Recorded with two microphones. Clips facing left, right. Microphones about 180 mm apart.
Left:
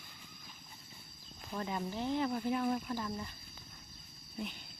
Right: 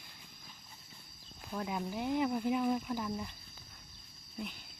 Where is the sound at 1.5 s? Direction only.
5° right (ahead or behind).